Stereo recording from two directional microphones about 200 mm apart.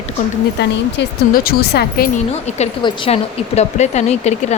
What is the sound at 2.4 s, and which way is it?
A woman's voice, 35° left (ahead or behind).